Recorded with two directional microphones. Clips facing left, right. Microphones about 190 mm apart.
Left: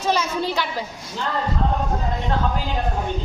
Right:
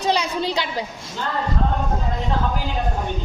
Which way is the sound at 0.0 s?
15° right (ahead or behind).